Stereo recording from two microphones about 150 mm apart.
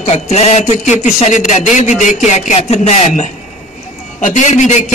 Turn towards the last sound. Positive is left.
turn(degrees=50)  # may be behind; listen again after turning